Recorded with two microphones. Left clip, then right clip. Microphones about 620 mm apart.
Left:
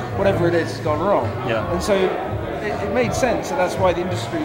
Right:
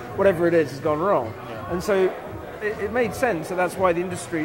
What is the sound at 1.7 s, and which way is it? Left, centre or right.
Speech, right.